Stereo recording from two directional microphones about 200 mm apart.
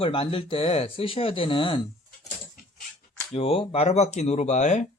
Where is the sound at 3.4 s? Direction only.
30° left (ahead or behind).